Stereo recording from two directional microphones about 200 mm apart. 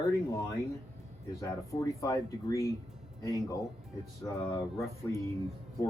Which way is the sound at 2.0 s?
15° left (ahead or behind).